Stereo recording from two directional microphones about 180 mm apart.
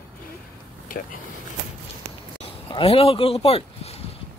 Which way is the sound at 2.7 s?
30° left (ahead or behind).